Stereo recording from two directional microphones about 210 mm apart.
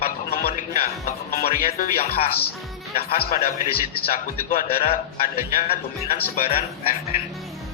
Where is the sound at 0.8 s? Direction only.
45° left (ahead or behind).